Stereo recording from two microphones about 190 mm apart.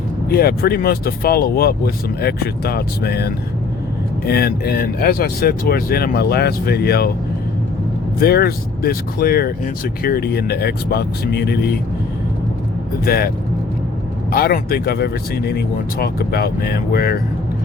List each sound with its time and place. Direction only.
0.3 s speech: 55° left (ahead or behind)
8.2 s speech: 55° left (ahead or behind)
13.1 s speech: 55° left (ahead or behind)